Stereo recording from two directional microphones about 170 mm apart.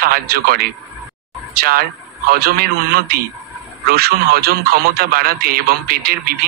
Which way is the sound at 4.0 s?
65° right (ahead or behind).